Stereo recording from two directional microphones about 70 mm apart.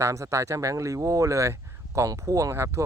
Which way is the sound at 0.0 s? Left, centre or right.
Right.